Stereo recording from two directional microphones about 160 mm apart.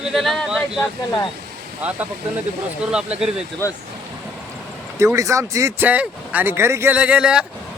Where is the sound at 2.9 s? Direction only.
5° right (ahead or behind).